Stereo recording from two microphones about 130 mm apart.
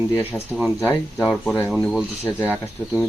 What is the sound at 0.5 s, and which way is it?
Speech, centre (ahead or behind).